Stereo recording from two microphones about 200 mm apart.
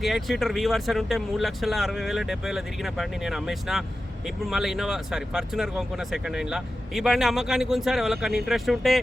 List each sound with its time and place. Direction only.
0.0 s speech: centre (ahead or behind)